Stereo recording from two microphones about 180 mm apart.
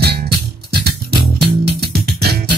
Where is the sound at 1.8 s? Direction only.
60° right (ahead or behind).